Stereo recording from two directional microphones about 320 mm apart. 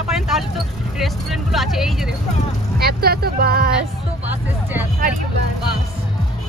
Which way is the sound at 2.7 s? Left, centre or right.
Right.